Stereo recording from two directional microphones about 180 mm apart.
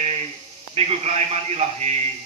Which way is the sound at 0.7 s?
35° right (ahead or behind).